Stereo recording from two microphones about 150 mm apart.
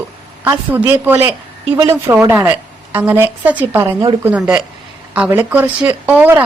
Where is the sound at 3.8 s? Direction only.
30° right (ahead or behind).